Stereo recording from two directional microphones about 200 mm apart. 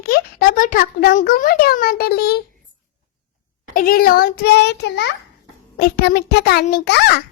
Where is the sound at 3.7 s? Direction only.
45° left (ahead or behind).